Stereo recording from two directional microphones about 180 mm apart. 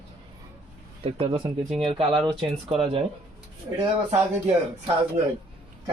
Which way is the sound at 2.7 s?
35° right (ahead or behind).